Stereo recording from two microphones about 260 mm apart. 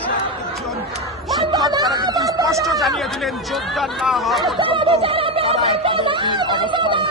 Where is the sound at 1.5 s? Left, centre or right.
Centre.